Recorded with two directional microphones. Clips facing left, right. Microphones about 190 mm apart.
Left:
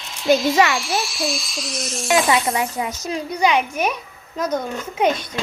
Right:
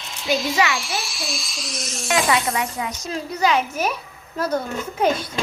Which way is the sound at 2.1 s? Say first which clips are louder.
Left 3 dB; 25° left (ahead or behind).